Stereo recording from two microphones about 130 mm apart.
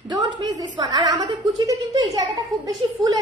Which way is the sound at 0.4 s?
30° right (ahead or behind).